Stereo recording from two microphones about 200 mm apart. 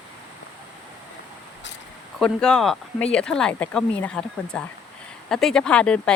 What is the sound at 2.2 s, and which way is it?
Speech, 5° left (ahead or behind).